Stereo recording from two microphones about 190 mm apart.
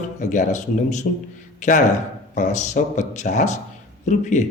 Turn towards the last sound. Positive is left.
turn(degrees=40)  # may be behind; listen again after turning